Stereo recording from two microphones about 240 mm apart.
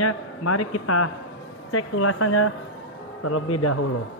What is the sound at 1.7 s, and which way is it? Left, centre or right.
Speech, left.